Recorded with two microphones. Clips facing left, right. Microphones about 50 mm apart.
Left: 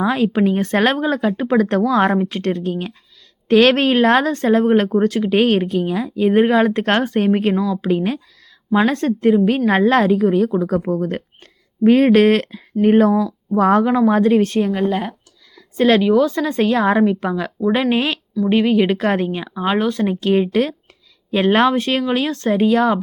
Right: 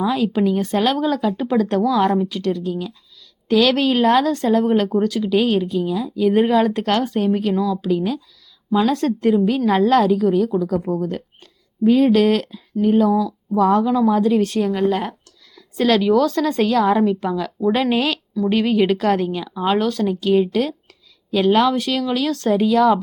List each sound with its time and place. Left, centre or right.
0.0 s speech: left
0.9 s speech: left
7.5 s a woman's voice: centre
7.8 s speech: left
12.8 s speech: left
13.1 s speech: left
13.6 s speech: left
14.7 s a woman's voice: centre
18.9 s speech: left
20.1 s speech: left